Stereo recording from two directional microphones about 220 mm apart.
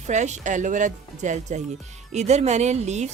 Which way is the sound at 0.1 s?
30° right (ahead or behind).